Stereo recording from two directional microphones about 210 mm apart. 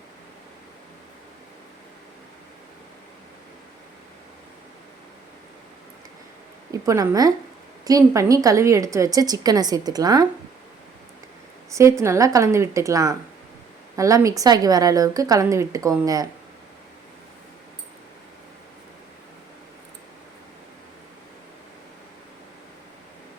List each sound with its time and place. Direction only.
6.7 s a woman's voice: 15° right (ahead or behind)
11.7 s a woman's voice: 15° right (ahead or behind)